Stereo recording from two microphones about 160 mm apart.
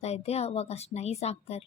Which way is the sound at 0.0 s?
40° left (ahead or behind).